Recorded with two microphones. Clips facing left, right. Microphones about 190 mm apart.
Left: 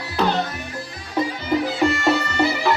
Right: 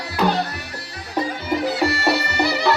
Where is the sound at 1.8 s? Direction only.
35° right (ahead or behind).